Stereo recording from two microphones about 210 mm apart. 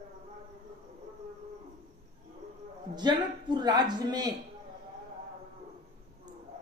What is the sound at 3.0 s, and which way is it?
A woman's voice, 20° right (ahead or behind).